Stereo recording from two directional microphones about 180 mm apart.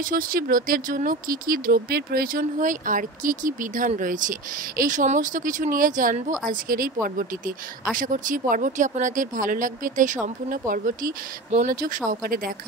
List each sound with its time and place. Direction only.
0.0 s speech: 55° right (ahead or behind)